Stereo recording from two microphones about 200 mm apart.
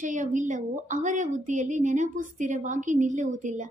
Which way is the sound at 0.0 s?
40° right (ahead or behind).